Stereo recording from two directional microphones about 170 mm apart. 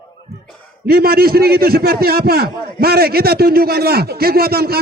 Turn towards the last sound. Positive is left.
turn(degrees=-65)  # may be behind; listen again after turning